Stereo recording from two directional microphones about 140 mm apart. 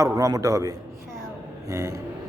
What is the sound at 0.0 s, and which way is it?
Speech, 25° right (ahead or behind).